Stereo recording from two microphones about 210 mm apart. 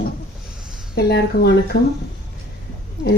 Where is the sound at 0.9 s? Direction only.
50° left (ahead or behind).